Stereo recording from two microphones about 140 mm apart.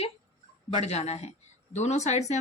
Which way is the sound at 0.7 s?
50° left (ahead or behind).